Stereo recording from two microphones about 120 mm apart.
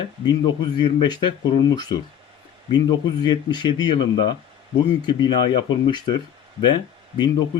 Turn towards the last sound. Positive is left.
turn(degrees=40)  # may be behind; listen again after turning